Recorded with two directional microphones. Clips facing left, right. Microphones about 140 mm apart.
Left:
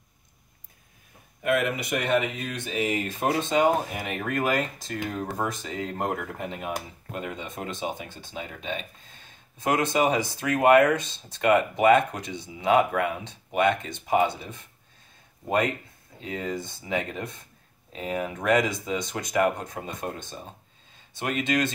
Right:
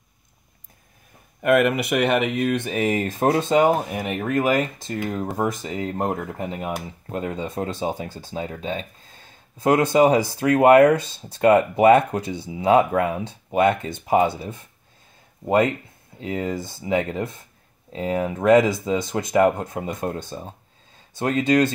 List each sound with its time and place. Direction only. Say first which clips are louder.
1.4 s speech: right 7 dB; 60° right (ahead or behind); by 3.7 s 30° right (ahead or behind)
4.2 s speech: right 5 dB; 20° right (ahead or behind)